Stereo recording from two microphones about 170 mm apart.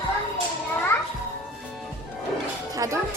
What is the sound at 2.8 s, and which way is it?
Music, 20° right (ahead or behind).